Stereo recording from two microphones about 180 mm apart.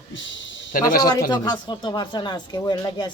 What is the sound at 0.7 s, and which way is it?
Speech, 50° left (ahead or behind).